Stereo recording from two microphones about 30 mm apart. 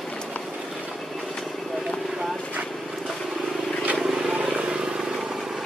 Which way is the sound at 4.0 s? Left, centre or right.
Centre.